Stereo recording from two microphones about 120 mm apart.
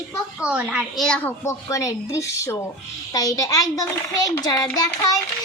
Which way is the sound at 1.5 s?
30° left (ahead or behind).